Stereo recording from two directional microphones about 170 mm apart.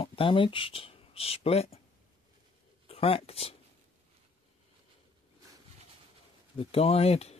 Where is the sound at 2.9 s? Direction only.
35° left (ahead or behind).